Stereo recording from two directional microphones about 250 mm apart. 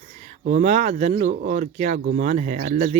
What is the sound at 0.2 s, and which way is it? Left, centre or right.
Speech, right.